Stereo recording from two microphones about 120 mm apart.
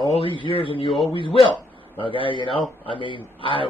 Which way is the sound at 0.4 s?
45° left (ahead or behind).